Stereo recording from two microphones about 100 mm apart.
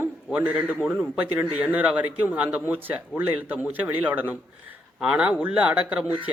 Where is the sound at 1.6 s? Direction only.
15° right (ahead or behind).